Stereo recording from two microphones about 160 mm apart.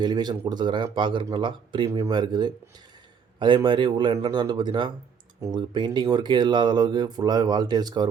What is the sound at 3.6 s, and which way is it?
Speech, 30° right (ahead or behind).